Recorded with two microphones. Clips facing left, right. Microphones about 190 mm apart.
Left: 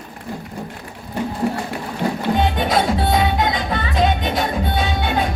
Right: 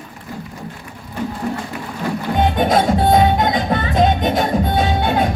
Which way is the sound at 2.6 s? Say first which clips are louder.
Right 3 dB; 50° right (ahead or behind).